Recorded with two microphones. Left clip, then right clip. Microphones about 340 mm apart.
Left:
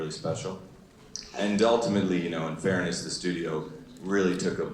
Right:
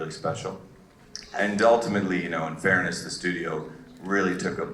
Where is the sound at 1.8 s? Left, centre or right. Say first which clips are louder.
Even; right.